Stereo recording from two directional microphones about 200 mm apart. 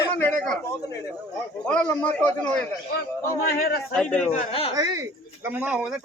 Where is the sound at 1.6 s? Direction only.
5° left (ahead or behind).